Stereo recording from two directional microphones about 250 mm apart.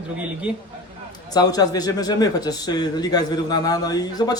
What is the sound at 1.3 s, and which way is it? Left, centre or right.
Speech, centre.